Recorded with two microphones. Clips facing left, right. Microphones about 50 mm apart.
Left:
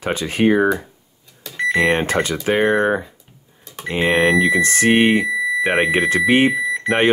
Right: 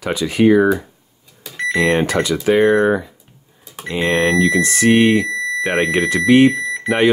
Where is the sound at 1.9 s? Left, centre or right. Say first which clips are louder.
Right 2 dB; left.